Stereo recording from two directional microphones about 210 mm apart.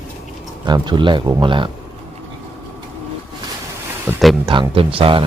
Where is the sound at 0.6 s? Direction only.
20° right (ahead or behind).